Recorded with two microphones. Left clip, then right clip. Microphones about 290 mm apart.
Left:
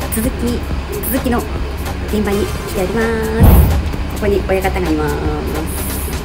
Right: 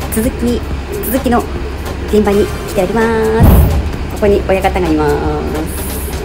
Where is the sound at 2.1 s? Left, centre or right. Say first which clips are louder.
Right 7 dB; centre.